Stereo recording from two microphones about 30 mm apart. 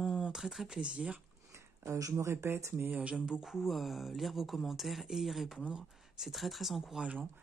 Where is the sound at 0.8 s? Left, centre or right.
Right.